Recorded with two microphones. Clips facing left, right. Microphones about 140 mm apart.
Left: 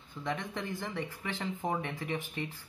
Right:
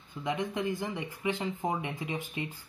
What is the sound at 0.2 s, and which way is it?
Speech, 15° right (ahead or behind).